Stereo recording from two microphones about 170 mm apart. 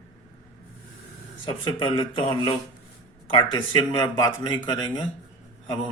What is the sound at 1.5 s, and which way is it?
Speech, 30° left (ahead or behind).